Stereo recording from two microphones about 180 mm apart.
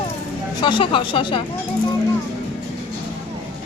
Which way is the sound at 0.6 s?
25° left (ahead or behind).